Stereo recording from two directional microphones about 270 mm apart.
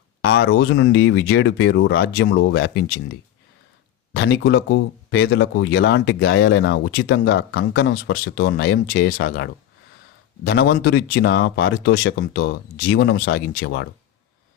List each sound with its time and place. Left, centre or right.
0.2 s speech: left
4.1 s speech: left